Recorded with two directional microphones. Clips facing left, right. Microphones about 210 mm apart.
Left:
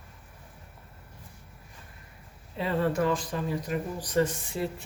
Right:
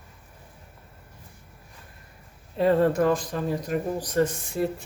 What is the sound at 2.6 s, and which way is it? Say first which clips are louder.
Speech: right 6 dB; 45° right (ahead or behind).